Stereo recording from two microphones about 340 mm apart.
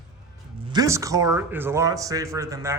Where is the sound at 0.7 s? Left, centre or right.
Centre.